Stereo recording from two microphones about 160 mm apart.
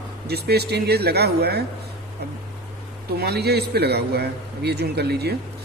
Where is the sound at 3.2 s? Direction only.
90° right.